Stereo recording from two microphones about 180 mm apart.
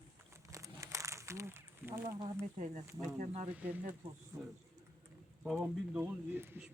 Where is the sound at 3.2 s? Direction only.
45° right (ahead or behind).